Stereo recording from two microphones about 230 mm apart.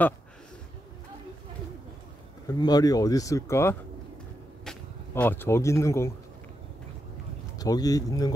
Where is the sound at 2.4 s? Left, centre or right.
Centre.